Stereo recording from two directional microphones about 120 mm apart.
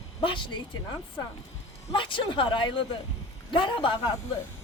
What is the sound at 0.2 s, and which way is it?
A woman's voice, 40° left (ahead or behind).